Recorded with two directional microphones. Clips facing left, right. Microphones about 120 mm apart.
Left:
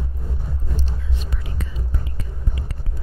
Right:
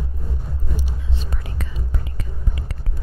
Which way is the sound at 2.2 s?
80° right.